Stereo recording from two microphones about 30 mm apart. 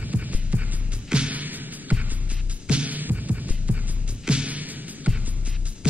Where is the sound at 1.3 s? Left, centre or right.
Right.